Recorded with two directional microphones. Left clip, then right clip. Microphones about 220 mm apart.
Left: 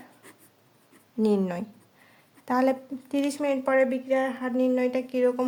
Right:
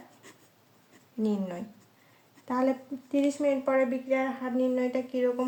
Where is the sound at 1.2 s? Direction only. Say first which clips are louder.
Left 7 dB; 45° left (ahead or behind).